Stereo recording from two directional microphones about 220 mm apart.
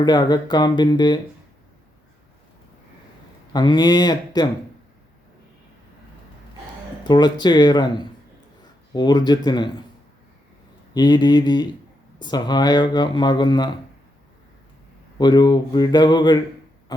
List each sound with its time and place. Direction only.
0.0 s speech: 20° left (ahead or behind)
3.5 s speech: 20° left (ahead or behind)
7.1 s speech: 20° left (ahead or behind)
10.9 s speech: 20° left (ahead or behind)
15.2 s speech: 20° left (ahead or behind)